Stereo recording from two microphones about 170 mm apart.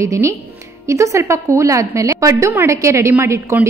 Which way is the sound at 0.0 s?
15° right (ahead or behind).